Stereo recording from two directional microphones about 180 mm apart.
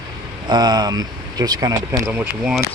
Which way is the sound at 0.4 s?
25° right (ahead or behind).